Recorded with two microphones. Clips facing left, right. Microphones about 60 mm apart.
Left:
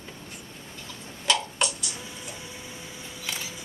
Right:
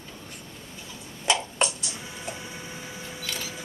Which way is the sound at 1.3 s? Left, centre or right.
Right.